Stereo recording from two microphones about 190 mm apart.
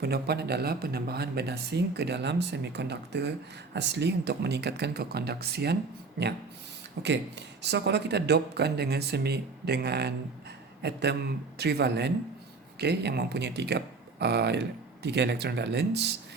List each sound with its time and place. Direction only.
0.0 s speech: 60° right (ahead or behind)
7.0 s speech: 65° right (ahead or behind)